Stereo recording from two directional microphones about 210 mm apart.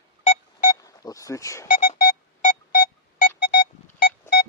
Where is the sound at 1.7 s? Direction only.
45° left (ahead or behind).